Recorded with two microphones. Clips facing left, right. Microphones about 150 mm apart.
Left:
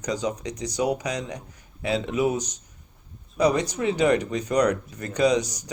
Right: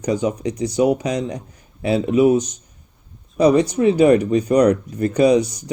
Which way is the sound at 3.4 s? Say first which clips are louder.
Right 8 dB; 30° right (ahead or behind).